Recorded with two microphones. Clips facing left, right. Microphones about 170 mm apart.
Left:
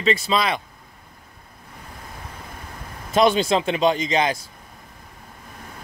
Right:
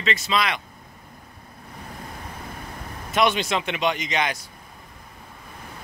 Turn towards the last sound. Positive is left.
turn(degrees=30)  # may be behind; listen again after turning